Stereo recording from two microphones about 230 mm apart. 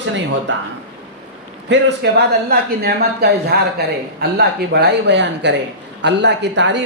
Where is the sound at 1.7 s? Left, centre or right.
Right.